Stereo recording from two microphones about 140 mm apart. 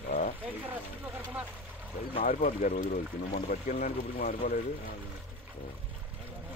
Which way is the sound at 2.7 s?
55° left (ahead or behind).